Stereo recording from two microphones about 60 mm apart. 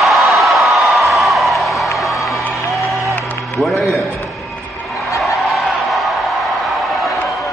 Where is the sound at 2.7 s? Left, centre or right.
Centre.